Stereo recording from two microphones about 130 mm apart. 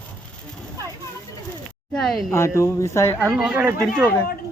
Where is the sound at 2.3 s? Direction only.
20° left (ahead or behind).